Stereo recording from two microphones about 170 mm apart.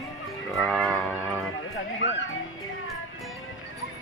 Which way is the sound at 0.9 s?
5° left (ahead or behind).